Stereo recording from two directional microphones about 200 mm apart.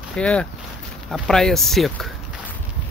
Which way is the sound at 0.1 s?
5° left (ahead or behind).